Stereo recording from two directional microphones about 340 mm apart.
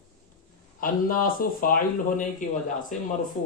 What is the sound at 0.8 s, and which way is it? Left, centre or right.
Speech, left.